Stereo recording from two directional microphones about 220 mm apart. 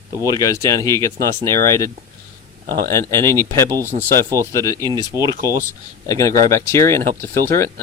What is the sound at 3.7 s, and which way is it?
Speech, 15° right (ahead or behind).